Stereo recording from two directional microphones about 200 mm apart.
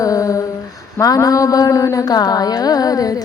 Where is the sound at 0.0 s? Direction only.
15° left (ahead or behind).